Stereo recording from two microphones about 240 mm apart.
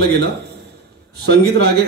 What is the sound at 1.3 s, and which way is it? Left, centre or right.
Speech, right.